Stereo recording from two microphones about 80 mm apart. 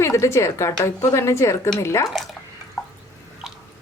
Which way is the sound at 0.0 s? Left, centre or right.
Left.